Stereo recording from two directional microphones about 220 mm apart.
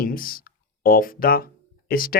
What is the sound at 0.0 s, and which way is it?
Speech, 40° left (ahead or behind).